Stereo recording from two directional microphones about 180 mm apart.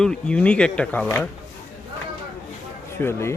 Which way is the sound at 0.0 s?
5° left (ahead or behind).